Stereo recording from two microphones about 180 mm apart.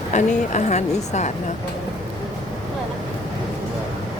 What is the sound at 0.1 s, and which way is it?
A woman's voice, 40° left (ahead or behind).